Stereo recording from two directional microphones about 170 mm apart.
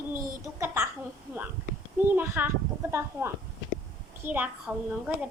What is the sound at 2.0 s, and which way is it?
A child's voice, 10° right (ahead or behind).